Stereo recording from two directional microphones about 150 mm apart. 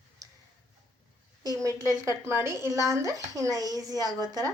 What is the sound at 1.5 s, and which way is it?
Speech, 20° right (ahead or behind).